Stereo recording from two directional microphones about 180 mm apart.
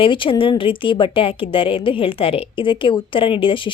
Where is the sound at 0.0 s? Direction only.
30° left (ahead or behind).